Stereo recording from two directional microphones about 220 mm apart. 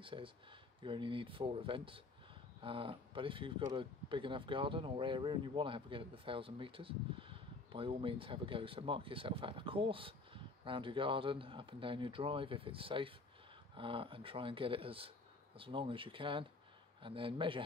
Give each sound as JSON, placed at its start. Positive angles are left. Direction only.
{"t": 0.0, "sound": "speech", "side_deg": -25}